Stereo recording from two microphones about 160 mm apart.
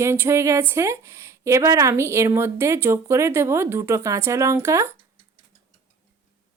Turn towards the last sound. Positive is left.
turn(degrees=-15)  # may be behind; listen again after turning